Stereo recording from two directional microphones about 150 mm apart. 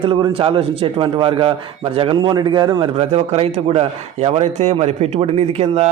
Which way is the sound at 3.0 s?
40° right (ahead or behind).